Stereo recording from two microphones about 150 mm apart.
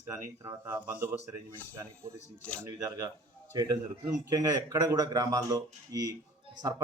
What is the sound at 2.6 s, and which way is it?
A man's voice, 20° right (ahead or behind).